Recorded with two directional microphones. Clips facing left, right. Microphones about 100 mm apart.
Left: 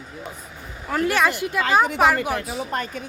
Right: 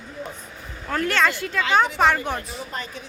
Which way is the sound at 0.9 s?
15° left (ahead or behind).